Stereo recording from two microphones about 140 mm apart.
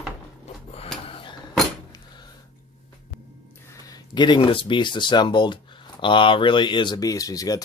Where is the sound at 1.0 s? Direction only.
40° left (ahead or behind).